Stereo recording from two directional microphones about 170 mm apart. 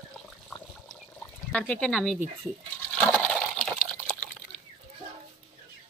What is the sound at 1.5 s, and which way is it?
Speech, 5° left (ahead or behind).